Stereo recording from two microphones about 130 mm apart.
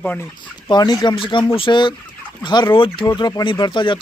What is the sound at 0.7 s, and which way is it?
Speech, 35° left (ahead or behind).